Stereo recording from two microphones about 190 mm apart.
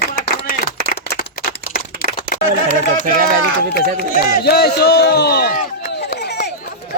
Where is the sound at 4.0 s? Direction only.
55° left (ahead or behind).